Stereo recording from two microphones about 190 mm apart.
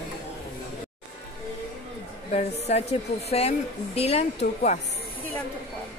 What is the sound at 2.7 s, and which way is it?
Speech, 35° left (ahead or behind).